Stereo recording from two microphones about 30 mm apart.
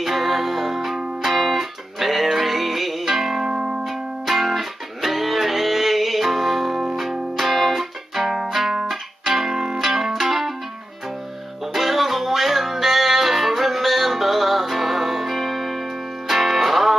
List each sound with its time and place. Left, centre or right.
0.0 s music: centre
3.4 s music: right
3.8 s music: centre
9.2 s guitar: centre
9.9 s music: centre
11.7 s music: centre